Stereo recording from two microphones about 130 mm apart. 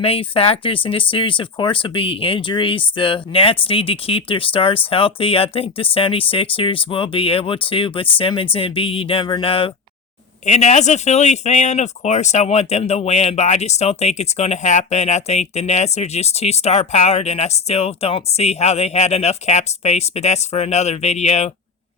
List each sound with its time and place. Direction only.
0.0 s speech: 45° left (ahead or behind)
10.4 s speech: 65° left (ahead or behind)